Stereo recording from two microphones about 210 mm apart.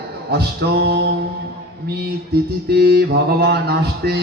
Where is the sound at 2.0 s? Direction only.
50° right (ahead or behind).